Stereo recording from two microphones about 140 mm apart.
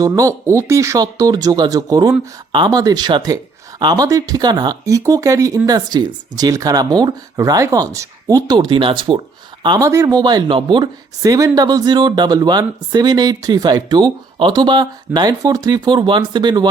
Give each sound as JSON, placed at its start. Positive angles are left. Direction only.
{"t": 0.0, "sound": "speech", "side_deg": -25}
{"t": 9.6, "sound": "speech", "side_deg": -25}